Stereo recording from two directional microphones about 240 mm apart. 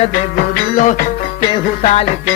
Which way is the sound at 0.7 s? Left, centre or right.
Left.